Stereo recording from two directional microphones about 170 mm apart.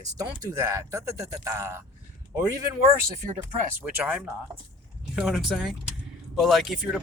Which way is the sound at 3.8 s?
10° right (ahead or behind).